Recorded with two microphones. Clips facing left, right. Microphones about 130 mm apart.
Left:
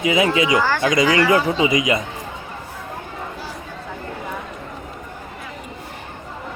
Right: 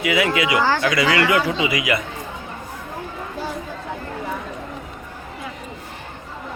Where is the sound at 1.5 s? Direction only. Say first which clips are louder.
Left 3 dB; 35° left (ahead or behind).